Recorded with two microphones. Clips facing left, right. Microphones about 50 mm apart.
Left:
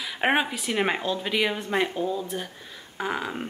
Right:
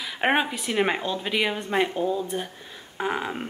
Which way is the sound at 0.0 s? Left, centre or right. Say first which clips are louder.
Right 1 dB; centre.